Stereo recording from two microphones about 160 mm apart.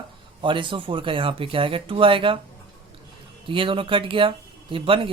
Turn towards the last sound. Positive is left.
turn(degrees=-35)  # may be behind; listen again after turning